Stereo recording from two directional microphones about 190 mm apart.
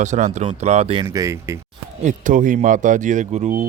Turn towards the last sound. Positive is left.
turn(degrees=-40)  # may be behind; listen again after turning